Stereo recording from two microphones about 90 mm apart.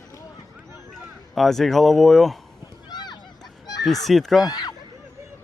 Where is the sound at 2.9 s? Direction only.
50° left (ahead or behind).